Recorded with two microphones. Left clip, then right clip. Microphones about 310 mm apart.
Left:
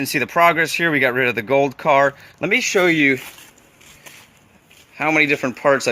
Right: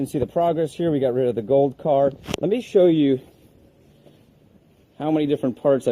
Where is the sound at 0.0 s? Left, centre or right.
Left.